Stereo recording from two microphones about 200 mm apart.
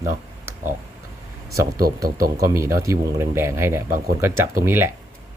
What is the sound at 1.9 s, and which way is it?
Speech, 15° right (ahead or behind).